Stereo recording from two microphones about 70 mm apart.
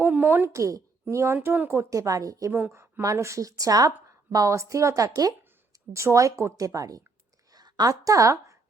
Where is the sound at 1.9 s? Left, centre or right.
Right.